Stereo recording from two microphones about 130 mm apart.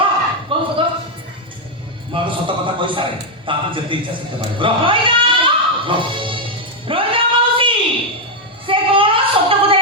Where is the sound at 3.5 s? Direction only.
40° right (ahead or behind).